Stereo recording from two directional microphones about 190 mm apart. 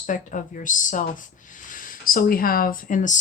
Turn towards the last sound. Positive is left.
turn(degrees=40)  # may be behind; listen again after turning